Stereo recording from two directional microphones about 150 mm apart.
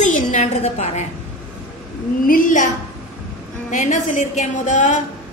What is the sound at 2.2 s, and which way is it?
A woman's voice, 65° left (ahead or behind).